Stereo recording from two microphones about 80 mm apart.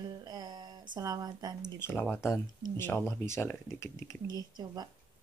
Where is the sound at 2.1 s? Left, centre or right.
Left.